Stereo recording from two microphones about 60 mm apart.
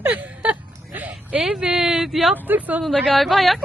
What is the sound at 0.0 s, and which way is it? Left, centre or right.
Speech, right.